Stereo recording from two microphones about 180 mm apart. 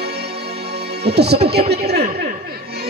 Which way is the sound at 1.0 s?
65° right (ahead or behind).